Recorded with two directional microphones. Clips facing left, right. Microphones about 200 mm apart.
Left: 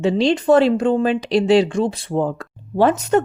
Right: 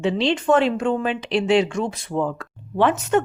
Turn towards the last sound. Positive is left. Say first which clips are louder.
# left 3 dB
turn(degrees=40)  # may be behind; listen again after turning